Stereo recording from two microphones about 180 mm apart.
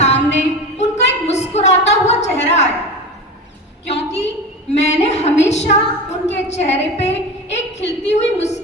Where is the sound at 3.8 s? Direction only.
35° left (ahead or behind).